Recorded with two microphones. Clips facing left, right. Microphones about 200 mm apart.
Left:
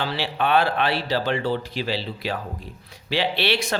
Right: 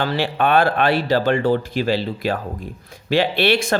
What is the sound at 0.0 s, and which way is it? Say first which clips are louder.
Speech: right 5 dB; 50° right (ahead or behind).